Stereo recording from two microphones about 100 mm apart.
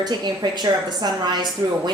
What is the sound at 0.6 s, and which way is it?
A woman's voice, 45° right (ahead or behind).